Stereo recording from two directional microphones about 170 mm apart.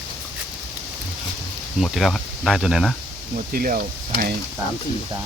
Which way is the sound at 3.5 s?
60° right (ahead or behind).